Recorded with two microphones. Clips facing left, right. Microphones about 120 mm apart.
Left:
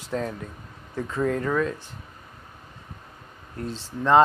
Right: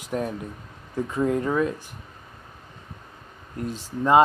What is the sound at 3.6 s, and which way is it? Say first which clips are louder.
Speech: right 2 dB; 15° right (ahead or behind).